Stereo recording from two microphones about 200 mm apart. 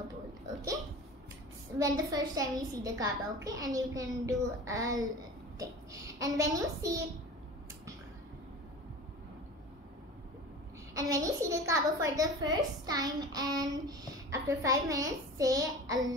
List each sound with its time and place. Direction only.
1.8 s a woman's voice: 20° right (ahead or behind)
11.0 s a woman's voice: 15° right (ahead or behind)